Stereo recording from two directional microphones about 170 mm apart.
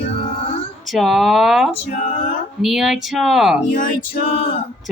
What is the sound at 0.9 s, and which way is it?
Speech, centre (ahead or behind).